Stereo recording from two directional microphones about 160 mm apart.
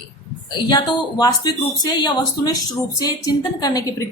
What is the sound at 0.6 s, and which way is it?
A woman's voice, 25° left (ahead or behind).